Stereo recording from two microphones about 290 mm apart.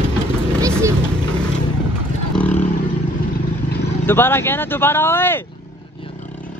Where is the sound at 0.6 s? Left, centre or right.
Centre.